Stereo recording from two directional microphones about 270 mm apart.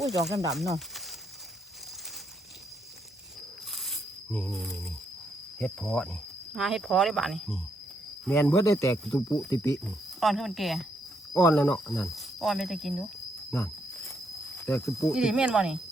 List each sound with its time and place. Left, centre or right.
0.3 s speech: centre
0.5 s speech: centre
3.7 s tearing: centre
5.5 s speech: centre
10.2 s speech: centre
13.5 s cricket: centre
15.0 s speech: centre